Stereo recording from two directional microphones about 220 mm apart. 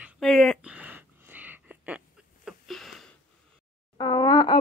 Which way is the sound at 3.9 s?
15° left (ahead or behind).